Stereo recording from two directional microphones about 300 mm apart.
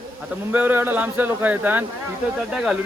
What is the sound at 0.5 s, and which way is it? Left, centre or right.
A man's voice, centre.